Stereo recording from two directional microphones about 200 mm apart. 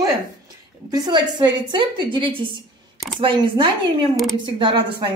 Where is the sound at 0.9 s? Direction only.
20° right (ahead or behind).